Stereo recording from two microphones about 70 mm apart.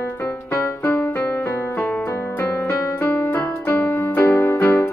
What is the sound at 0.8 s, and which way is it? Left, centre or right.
Music, left.